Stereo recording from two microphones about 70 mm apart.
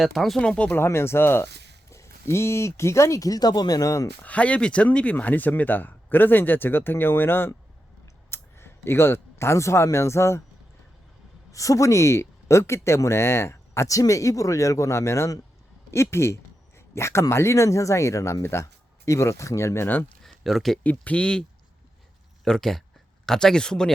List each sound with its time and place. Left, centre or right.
0.0 s speech: centre
0.4 s speech: centre
0.8 s speech: left
4.2 s speech: centre; by 10.4 s left
11.5 s speech: left
20.2 s a sound: centre
20.8 s speech: left
22.4 s speech: centre